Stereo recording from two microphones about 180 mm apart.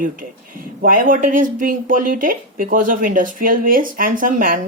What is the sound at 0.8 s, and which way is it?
Speech, 50° right (ahead or behind).